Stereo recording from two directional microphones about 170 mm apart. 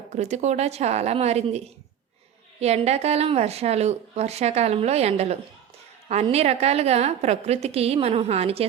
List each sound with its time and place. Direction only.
0.1 s speech: 40° right (ahead or behind)